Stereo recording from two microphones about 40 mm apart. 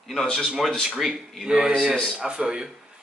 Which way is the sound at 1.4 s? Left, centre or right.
Right.